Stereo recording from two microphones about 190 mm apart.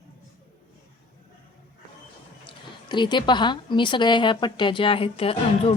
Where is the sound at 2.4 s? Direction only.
25° left (ahead or behind).